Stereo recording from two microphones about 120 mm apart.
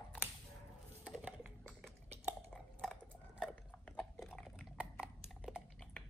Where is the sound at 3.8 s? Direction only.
5° left (ahead or behind).